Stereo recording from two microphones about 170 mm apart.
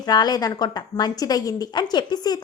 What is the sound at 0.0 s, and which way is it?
A woman's voice, 25° left (ahead or behind).